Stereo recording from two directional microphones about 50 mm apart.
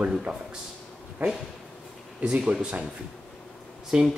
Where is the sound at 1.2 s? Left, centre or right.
Right.